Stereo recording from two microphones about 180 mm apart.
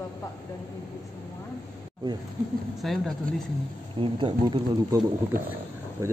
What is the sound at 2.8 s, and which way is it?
Speech, centre (ahead or behind).